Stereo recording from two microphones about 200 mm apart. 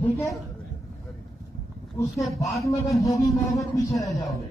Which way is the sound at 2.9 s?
15° left (ahead or behind).